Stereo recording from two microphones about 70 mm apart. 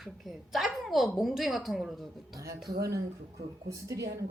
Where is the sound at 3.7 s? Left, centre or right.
Right.